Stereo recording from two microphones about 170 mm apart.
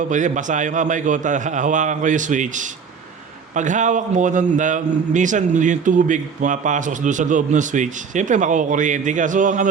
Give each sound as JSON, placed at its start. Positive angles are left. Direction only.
{"t": 0.1, "sound": "a man's voice", "side_deg": -45}